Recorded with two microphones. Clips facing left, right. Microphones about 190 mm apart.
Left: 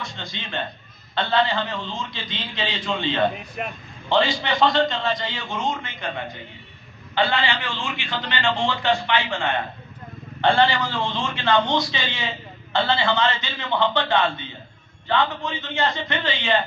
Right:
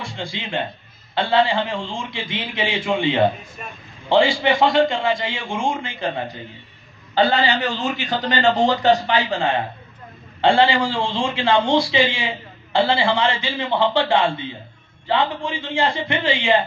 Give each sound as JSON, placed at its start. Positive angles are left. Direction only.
{"t": 0.0, "sound": "a man's voice", "side_deg": -30}
{"t": 3.6, "sound": "a man's voice", "side_deg": 70}
{"t": 4.1, "sound": "a man's voice", "side_deg": -25}